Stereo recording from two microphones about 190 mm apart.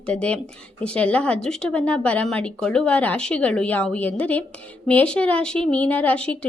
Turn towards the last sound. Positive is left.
turn(degrees=5)  # may be behind; listen again after turning